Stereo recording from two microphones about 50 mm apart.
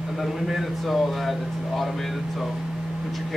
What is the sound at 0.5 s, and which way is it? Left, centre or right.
Speech, centre.